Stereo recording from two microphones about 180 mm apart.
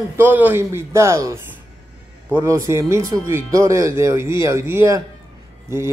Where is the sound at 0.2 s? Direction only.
10° right (ahead or behind).